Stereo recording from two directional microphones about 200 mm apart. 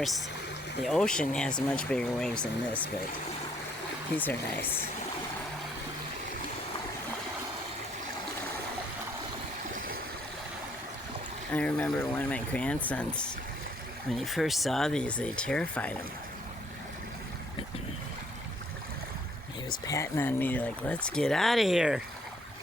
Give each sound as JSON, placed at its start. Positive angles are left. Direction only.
{"t": 0.0, "sound": "speech", "side_deg": 0}
{"t": 4.2, "sound": "speech", "side_deg": 10}
{"t": 9.7, "sound": "stream", "side_deg": -45}
{"t": 11.5, "sound": "speech", "side_deg": 5}
{"t": 19.8, "sound": "speech", "side_deg": 15}